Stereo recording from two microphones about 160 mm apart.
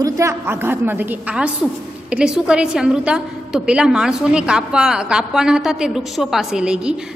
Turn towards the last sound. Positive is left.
turn(degrees=-5)  # may be behind; listen again after turning